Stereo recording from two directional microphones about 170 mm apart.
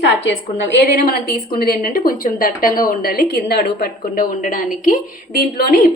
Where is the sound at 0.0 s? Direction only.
90° left.